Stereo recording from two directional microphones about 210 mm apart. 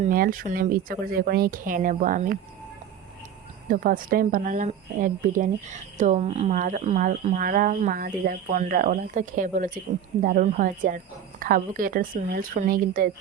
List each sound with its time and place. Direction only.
0.0 s speech: 40° right (ahead or behind)
3.7 s speech: 40° right (ahead or behind)